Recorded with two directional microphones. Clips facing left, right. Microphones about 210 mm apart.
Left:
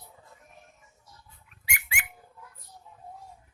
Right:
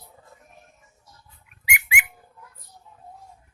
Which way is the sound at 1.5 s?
10° right (ahead or behind).